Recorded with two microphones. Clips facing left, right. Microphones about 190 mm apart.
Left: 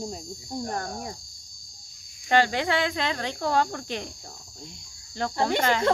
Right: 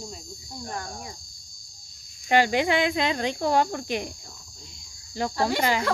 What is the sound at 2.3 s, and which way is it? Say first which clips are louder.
Speech: right 2 dB; 15° right (ahead or behind).